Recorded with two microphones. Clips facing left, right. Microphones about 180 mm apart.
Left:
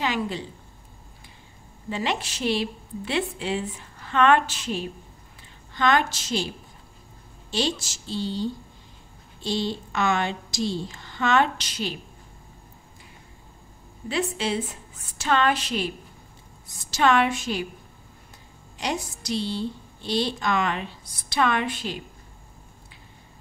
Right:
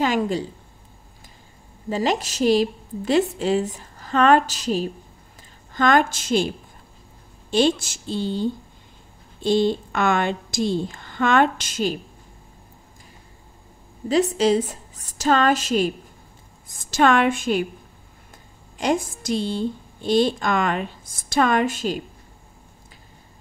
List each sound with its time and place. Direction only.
0.0 s a woman's voice: 45° right (ahead or behind)
1.9 s a woman's voice: 40° right (ahead or behind)
7.5 s a woman's voice: 55° right (ahead or behind)
14.0 s a woman's voice: 40° right (ahead or behind)
18.8 s a woman's voice: 50° right (ahead or behind)